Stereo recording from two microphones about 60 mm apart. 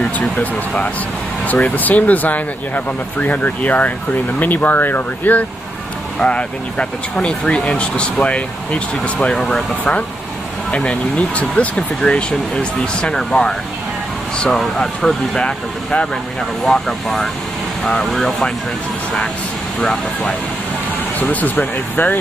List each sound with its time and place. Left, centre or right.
1.5 s speech: left
6.1 s speech: centre
14.6 s speech: centre
19.8 s speech: centre
21.2 s speech: left